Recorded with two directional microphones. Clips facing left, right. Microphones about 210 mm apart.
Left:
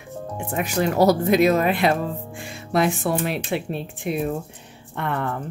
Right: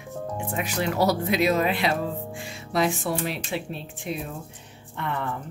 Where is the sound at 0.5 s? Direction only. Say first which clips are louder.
Left 6 dB; 45° left (ahead or behind).